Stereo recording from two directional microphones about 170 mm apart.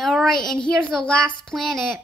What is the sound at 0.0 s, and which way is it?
Child singing, centre (ahead or behind).